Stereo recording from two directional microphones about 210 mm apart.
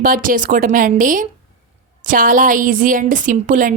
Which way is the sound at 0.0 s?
40° right (ahead or behind).